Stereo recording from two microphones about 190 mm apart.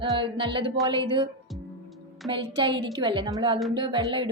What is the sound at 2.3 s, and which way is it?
A woman's voice, 25° right (ahead or behind).